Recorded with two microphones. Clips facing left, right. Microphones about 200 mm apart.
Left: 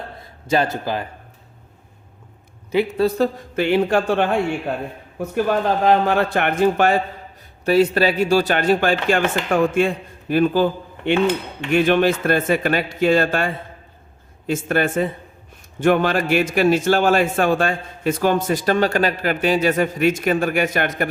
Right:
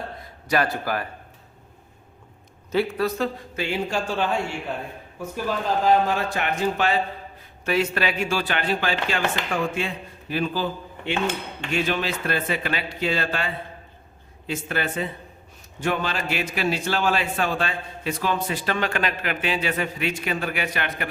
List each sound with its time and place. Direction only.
0.4 s a man's voice: 25° left (ahead or behind)
2.7 s a man's voice: 25° left (ahead or behind)
3.5 s a man's voice: 60° left (ahead or behind)
7.6 s a man's voice: 35° left (ahead or behind)